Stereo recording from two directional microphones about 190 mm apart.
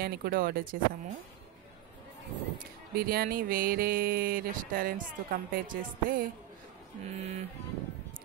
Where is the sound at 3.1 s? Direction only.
50° right (ahead or behind).